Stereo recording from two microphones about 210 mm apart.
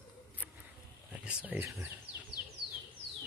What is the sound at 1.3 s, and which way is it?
Speech, 5° right (ahead or behind).